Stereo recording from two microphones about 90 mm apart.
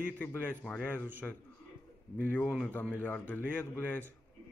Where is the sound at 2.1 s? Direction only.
20° left (ahead or behind).